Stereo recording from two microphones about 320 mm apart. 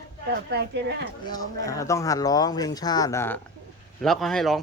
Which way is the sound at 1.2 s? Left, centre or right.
Centre.